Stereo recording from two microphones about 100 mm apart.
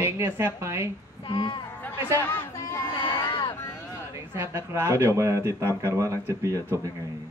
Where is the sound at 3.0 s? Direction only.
60° left (ahead or behind).